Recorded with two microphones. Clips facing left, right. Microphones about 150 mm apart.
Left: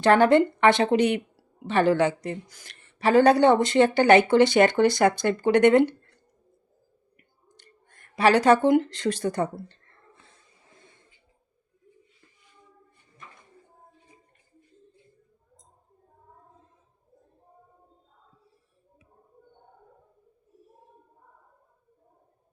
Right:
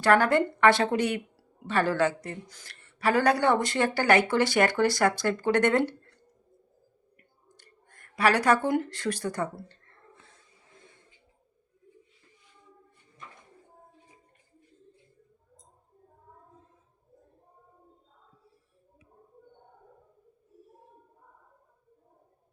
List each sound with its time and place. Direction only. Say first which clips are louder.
0.0 s a woman's voice: left 4 dB; 20° left (ahead or behind)
7.2 s clicking: left 1 dB; 20° left (ahead or behind)
8.6 s a woman's voice: left 6 dB; 20° left (ahead or behind)